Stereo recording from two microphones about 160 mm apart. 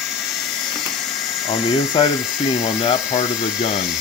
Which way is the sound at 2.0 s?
30° left (ahead or behind).